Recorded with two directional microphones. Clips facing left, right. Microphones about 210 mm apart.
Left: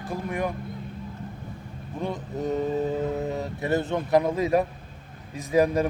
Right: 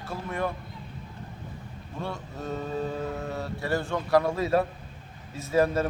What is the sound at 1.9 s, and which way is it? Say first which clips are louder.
Mantra: left 5 dB; 15° left (ahead or behind).